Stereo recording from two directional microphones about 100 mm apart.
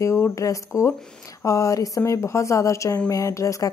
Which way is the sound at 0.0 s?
30° left (ahead or behind).